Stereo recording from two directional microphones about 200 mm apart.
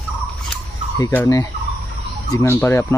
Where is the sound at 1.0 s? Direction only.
15° left (ahead or behind).